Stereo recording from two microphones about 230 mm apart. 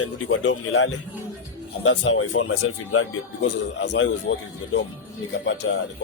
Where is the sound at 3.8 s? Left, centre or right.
Left.